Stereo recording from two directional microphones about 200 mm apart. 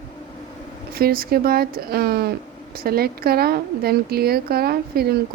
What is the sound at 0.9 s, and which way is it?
Speech, 45° right (ahead or behind).